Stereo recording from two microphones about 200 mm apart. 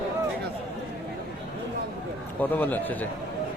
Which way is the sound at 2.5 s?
10° left (ahead or behind).